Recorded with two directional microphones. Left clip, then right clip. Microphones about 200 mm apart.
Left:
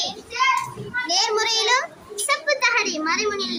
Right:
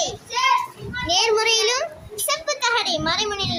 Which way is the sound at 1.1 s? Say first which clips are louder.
Right 3 dB; 25° right (ahead or behind).